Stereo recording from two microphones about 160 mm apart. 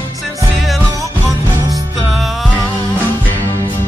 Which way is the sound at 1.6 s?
20° right (ahead or behind).